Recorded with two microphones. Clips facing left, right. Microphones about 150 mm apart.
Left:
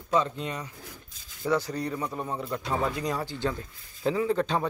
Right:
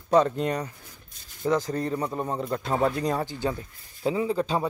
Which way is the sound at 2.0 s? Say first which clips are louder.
Right 4 dB; 25° right (ahead or behind).